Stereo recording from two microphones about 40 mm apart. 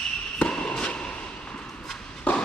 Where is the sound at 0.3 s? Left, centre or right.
Left.